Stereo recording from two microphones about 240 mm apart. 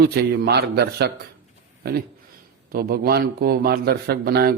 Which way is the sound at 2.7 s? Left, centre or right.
Right.